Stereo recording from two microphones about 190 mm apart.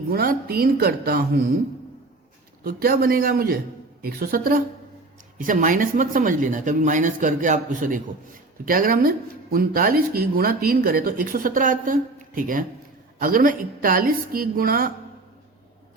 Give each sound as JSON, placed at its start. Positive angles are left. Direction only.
{"t": 0.1, "sound": "speech", "side_deg": -55}
{"t": 2.6, "sound": "speech", "side_deg": -50}